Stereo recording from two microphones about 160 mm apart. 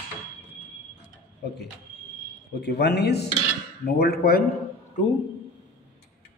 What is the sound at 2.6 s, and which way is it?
A man's voice, 90° left.